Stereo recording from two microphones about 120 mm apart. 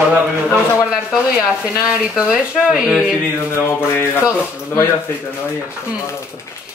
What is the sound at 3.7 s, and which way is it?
Rub, 20° left (ahead or behind).